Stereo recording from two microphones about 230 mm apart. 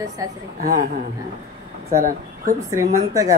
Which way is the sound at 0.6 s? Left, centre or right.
Right.